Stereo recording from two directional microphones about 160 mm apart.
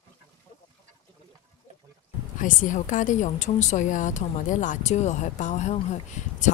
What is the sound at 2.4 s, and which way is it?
A woman's voice, 55° left (ahead or behind).